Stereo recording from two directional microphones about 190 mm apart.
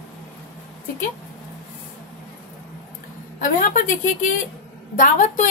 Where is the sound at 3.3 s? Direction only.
45° left (ahead or behind).